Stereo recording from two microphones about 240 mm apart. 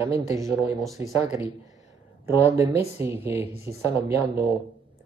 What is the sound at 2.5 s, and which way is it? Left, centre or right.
Speech, centre.